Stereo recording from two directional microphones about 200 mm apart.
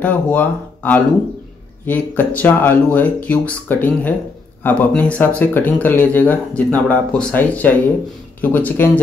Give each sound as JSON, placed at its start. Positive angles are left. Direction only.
{"t": 0.0, "sound": "speech", "side_deg": 10}